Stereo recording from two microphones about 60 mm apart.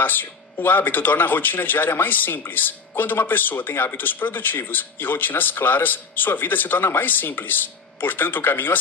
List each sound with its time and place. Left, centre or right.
0.0 s speech: left